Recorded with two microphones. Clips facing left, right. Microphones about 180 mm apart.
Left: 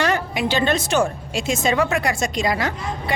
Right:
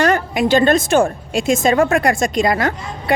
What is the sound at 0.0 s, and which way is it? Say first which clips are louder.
A woman's voice: right 5 dB; 45° right (ahead or behind).